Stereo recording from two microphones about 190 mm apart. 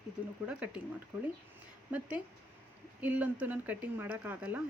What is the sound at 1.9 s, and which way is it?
A woman's voice, 10° right (ahead or behind).